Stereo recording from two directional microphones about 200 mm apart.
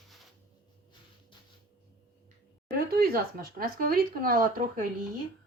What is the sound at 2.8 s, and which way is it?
Speech, 50° right (ahead or behind).